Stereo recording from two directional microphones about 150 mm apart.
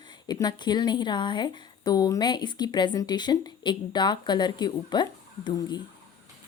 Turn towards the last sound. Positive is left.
turn(degrees=30)  # may be behind; listen again after turning